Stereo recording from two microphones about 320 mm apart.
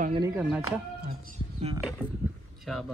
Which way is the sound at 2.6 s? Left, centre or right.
Centre.